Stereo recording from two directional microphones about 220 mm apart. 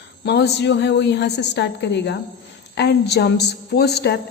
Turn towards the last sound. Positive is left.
turn(degrees=50)  # may be behind; listen again after turning